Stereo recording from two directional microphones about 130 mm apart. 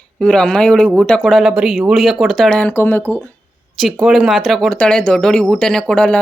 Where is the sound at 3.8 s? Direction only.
Centre (ahead or behind).